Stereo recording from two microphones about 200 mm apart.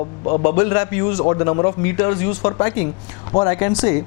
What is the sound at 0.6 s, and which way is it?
Speech, 20° left (ahead or behind).